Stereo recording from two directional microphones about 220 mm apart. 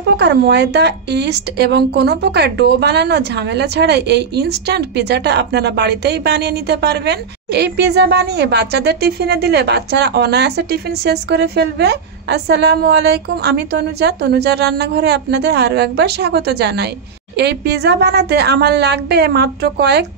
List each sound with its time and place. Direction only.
0.0 s a woman's voice: 50° right (ahead or behind)